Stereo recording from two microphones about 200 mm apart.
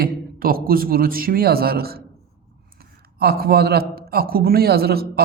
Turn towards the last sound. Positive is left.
turn(degrees=-50)  # may be behind; listen again after turning